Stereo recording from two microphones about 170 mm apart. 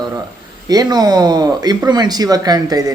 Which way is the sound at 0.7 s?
25° right (ahead or behind).